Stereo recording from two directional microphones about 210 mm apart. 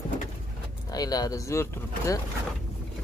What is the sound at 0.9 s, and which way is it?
Speech, 15° left (ahead or behind).